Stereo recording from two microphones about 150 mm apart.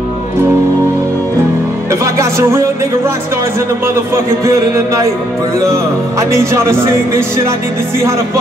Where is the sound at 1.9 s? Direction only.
20° right (ahead or behind).